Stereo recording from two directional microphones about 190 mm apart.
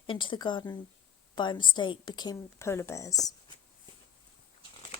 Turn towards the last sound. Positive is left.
turn(degrees=20)  # may be behind; listen again after turning